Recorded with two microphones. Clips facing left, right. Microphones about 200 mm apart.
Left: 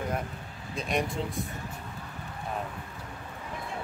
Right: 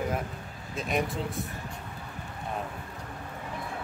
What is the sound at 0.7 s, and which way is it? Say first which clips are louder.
Speech: even; centre (ahead or behind).